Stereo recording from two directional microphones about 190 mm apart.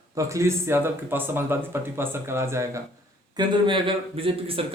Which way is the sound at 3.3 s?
25° right (ahead or behind).